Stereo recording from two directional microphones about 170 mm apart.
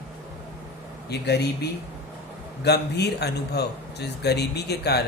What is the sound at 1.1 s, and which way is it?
Speech, 75° left (ahead or behind).